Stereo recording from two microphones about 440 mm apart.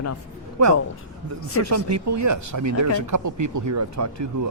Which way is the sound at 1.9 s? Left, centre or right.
Right.